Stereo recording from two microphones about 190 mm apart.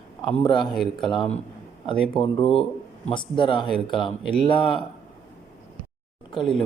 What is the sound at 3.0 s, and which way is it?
Speech, 25° left (ahead or behind).